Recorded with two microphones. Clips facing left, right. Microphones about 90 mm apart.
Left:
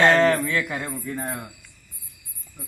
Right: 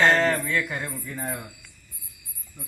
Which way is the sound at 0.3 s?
90° left.